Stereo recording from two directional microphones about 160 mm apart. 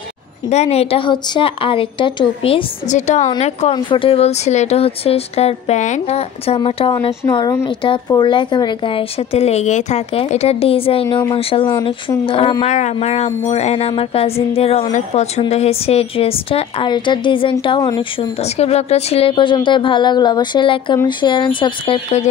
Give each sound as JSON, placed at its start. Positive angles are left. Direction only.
{"t": 0.5, "sound": "speech", "side_deg": 40}
{"t": 2.9, "sound": "a woman's voice", "side_deg": 45}
{"t": 3.7, "sound": "speech", "side_deg": 30}
{"t": 18.4, "sound": "speech", "side_deg": 40}